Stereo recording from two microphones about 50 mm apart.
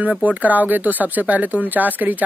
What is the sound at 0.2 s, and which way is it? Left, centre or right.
A woman's voice, right.